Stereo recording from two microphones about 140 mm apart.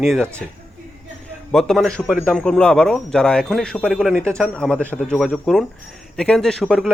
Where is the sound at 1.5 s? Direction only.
5° left (ahead or behind).